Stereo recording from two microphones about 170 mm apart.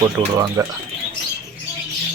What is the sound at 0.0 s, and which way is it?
Speech, 20° right (ahead or behind).